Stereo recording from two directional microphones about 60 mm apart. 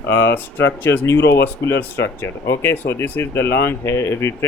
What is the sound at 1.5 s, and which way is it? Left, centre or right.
Speech, left.